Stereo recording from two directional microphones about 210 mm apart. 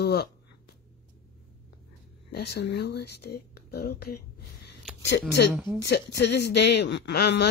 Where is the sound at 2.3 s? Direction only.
50° left (ahead or behind).